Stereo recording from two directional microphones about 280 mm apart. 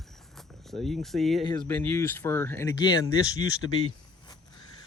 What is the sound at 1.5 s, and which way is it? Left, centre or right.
Speech, centre.